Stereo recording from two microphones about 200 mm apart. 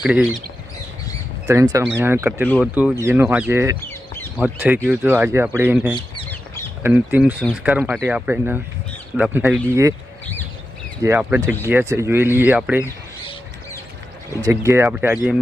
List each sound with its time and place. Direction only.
0.0 s speech: 5° right (ahead or behind)
1.5 s speech: 15° right (ahead or behind)
3.8 s chicken: 10° left (ahead or behind)
4.4 s speech: 10° right (ahead or behind)
5.9 s speech: 25° left (ahead or behind)
6.2 s a sound: 10° left (ahead or behind)
6.8 s speech: 10° right (ahead or behind)
11.0 s speech: 10° right (ahead or behind)
14.4 s speech: 15° right (ahead or behind)